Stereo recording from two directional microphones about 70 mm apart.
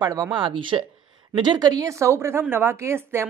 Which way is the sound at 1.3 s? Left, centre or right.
Right.